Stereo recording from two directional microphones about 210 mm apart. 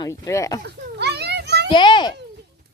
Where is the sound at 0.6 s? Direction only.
50° right (ahead or behind).